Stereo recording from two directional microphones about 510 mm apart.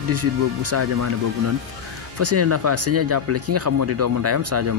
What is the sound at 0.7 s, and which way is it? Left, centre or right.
Speech, right.